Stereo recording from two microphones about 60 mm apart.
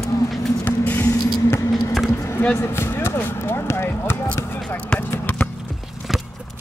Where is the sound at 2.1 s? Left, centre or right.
Left.